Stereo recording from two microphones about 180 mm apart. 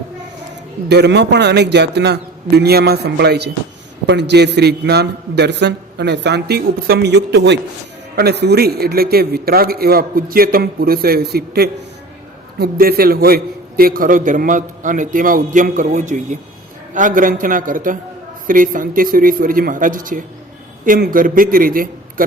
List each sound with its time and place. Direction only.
0.9 s a man's voice: 70° right (ahead or behind); by 21.8 s 50° right (ahead or behind)